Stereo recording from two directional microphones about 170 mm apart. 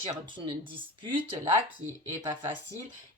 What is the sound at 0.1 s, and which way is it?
Speech, 30° right (ahead or behind).